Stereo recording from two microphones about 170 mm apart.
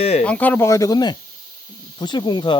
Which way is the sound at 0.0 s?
35° left (ahead or behind).